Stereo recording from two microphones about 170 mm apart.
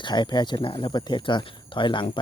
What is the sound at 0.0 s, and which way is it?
Speech, 25° left (ahead or behind).